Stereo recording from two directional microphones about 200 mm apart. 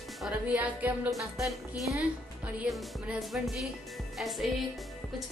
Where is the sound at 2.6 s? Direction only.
Centre (ahead or behind).